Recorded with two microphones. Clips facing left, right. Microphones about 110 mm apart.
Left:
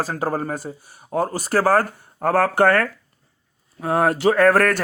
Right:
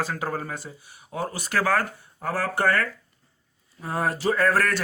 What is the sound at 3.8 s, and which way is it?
Speech, 70° left (ahead or behind).